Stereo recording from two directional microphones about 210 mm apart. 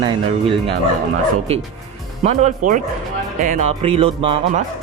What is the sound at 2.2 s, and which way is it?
Speech, 35° right (ahead or behind).